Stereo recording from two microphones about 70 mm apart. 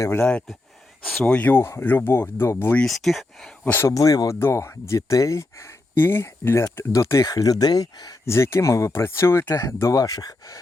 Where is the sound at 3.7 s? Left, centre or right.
Left.